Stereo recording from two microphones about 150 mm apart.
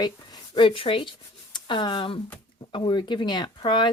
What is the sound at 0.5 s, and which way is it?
Speech, 35° left (ahead or behind).